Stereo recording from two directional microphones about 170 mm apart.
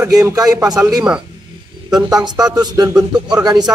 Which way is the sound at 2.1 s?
25° right (ahead or behind).